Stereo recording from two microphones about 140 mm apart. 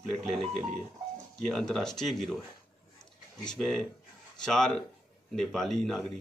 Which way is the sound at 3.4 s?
5° left (ahead or behind).